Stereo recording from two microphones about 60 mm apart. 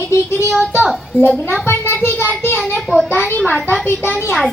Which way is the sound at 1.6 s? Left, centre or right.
Left.